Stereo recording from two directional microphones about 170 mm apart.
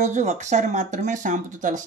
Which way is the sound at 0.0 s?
45° right (ahead or behind).